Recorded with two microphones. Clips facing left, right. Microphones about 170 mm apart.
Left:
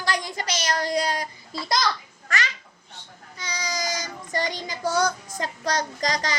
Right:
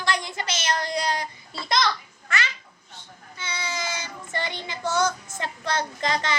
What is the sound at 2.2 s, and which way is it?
Babbling, 40° left (ahead or behind).